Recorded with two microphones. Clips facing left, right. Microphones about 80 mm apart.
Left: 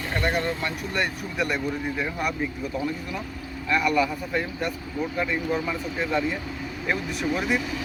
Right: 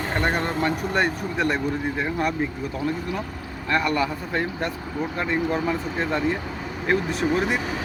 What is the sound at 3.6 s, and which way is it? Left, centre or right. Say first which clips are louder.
Speech: even; right.